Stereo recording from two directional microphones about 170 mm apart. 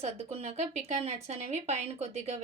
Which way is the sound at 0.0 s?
35° right (ahead or behind).